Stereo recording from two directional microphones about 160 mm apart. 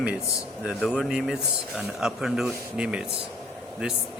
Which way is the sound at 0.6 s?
Centre (ahead or behind).